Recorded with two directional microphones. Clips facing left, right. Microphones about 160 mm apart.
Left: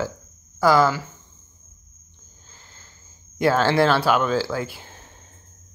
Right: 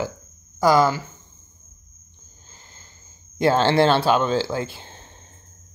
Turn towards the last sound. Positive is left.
turn(degrees=-25)  # may be behind; listen again after turning